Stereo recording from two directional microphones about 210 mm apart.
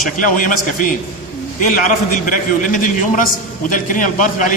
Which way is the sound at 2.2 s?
40° left (ahead or behind).